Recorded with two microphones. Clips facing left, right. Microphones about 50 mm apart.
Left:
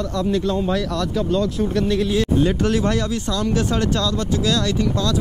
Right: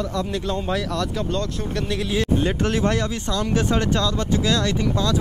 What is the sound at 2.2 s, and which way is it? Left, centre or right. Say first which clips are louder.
Speech: right 1 dB; right.